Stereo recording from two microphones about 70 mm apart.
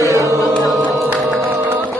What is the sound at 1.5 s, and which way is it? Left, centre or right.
Music, right.